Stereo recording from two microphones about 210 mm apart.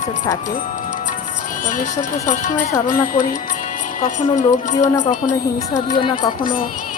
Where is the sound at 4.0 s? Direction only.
35° left (ahead or behind).